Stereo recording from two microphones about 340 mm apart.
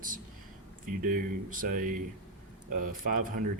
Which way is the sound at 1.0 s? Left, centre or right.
Right.